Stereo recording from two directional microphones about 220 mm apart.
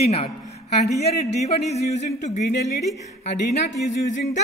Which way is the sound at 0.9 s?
30° left (ahead or behind).